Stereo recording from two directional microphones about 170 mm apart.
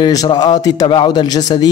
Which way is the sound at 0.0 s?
25° left (ahead or behind).